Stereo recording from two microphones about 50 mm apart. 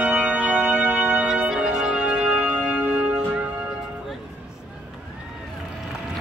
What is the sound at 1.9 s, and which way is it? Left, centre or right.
Organ, right.